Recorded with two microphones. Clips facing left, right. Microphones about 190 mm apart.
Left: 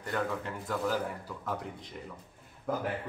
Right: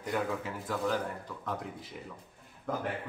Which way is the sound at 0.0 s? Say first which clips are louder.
Even; 5° right (ahead or behind).